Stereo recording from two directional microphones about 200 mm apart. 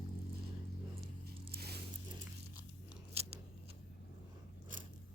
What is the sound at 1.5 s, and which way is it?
Biting, 50° right (ahead or behind).